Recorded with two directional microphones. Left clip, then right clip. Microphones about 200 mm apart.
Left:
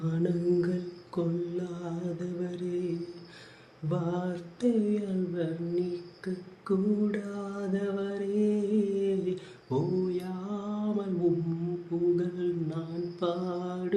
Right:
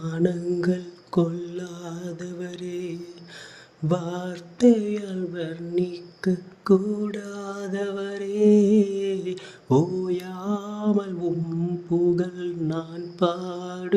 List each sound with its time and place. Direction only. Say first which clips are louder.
0.0 s mantra: right 5 dB; 35° right (ahead or behind)